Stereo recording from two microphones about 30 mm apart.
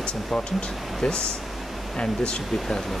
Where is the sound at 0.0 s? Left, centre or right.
Left.